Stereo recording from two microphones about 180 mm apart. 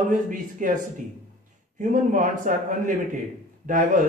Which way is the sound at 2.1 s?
45° right (ahead or behind).